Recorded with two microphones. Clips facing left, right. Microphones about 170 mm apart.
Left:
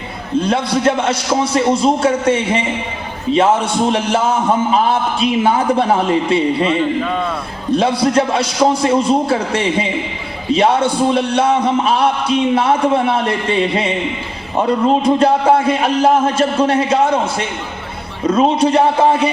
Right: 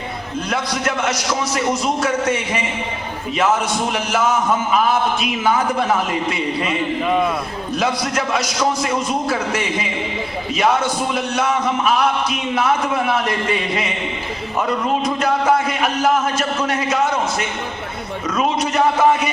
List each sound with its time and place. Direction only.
0.3 s a man's voice: 30° left (ahead or behind)
7.0 s a man's voice: 10° right (ahead or behind)
7.7 s a man's voice: 30° left (ahead or behind)